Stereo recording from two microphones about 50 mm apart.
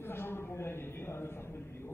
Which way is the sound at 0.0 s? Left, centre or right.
Left.